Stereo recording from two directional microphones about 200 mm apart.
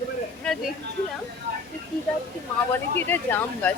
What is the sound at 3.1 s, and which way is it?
Speech, 10° left (ahead or behind).